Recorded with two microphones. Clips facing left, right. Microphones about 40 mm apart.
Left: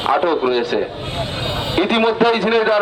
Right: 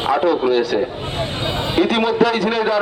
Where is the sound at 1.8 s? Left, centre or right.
Left.